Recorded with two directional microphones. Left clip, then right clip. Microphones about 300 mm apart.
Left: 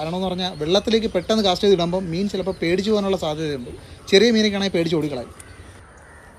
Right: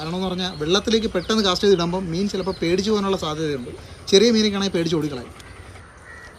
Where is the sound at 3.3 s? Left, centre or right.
Centre.